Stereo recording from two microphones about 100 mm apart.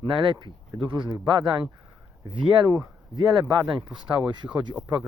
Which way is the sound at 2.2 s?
50° right (ahead or behind).